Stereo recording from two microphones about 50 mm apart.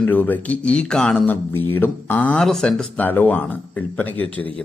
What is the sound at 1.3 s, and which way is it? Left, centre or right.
Speech, left.